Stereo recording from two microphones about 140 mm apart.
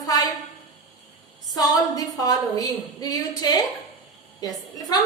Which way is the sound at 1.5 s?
25° left (ahead or behind).